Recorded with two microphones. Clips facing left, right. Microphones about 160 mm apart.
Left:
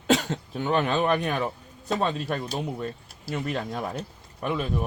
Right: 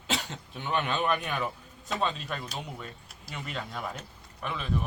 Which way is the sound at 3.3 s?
45° left (ahead or behind).